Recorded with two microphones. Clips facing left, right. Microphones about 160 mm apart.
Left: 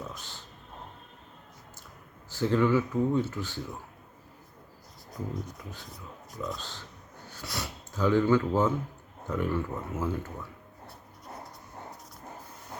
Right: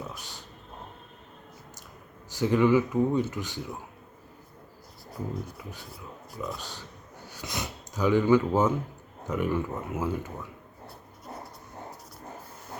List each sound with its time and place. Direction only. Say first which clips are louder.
0.1 s a sound: right 1 dB; 15° right (ahead or behind)
2.3 s speech: right 3 dB; 15° right (ahead or behind)
5.1 s speech: right 1 dB; 5° right (ahead or behind)